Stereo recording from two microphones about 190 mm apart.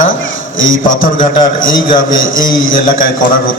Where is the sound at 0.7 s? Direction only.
45° left (ahead or behind).